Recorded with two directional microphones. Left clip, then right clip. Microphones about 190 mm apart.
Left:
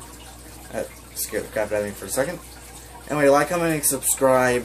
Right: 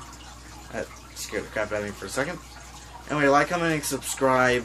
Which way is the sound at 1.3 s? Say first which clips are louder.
Left 4 dB; 5° left (ahead or behind).